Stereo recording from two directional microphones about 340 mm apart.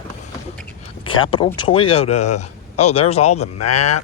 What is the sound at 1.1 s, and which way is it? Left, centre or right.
Speech, centre.